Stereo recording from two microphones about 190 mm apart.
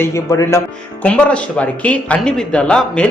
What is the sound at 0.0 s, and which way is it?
A man's voice, 15° left (ahead or behind).